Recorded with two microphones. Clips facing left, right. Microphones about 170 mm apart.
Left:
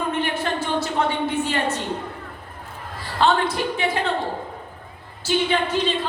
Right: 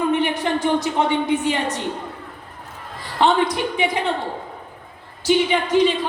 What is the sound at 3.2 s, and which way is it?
Speech, 15° right (ahead or behind).